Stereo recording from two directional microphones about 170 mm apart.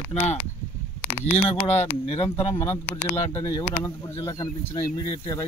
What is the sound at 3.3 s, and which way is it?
Speech, 25° left (ahead or behind).